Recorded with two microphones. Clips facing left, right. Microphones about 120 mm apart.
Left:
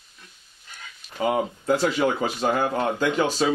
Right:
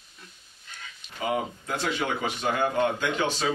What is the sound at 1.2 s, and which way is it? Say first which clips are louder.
Speech: left 6 dB; 35° left (ahead or behind).